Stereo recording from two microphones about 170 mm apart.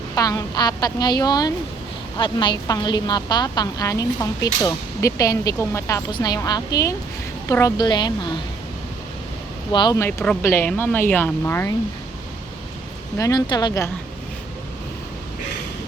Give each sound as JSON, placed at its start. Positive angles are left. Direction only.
{"t": 0.2, "sound": "a woman's voice", "side_deg": 20}
{"t": 9.7, "sound": "a woman's voice", "side_deg": 25}
{"t": 10.1, "sound": "speech", "side_deg": 10}
{"t": 13.1, "sound": "a woman's voice", "side_deg": 20}